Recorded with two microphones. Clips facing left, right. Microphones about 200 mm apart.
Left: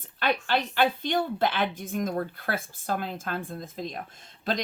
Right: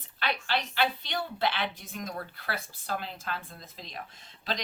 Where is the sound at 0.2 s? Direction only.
50° left (ahead or behind).